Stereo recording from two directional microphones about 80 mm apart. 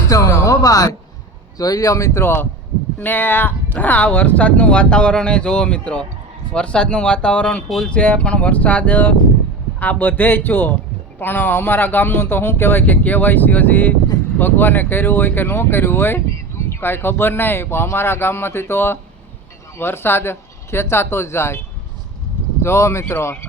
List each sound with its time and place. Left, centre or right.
0.1 s speech: left
22.6 s speech: left